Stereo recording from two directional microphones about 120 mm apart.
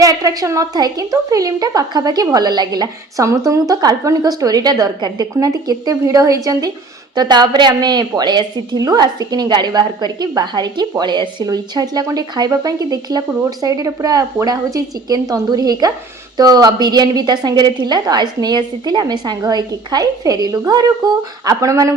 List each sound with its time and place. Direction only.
0.0 s a woman's voice: 30° right (ahead or behind)